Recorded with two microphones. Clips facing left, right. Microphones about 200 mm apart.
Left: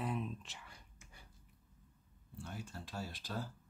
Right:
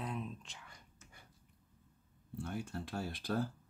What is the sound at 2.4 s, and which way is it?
Speech, 55° right (ahead or behind).